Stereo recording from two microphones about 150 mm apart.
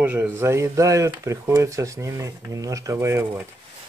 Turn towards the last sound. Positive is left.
turn(degrees=-15)  # may be behind; listen again after turning